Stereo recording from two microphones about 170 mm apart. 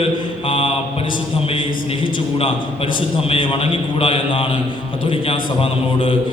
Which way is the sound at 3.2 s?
30° left (ahead or behind).